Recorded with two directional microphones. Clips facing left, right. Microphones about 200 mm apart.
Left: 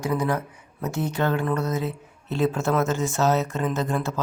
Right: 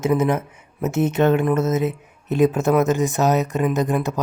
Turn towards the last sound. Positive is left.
turn(degrees=-15)  # may be behind; listen again after turning